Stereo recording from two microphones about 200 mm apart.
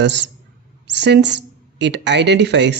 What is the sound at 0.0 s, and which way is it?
A woman's voice, 60° right (ahead or behind).